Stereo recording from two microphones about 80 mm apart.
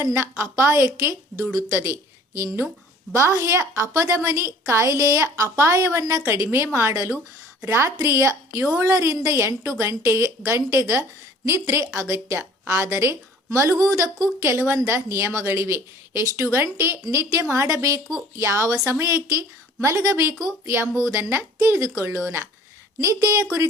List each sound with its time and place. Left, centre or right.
0.0 s a woman's voice: right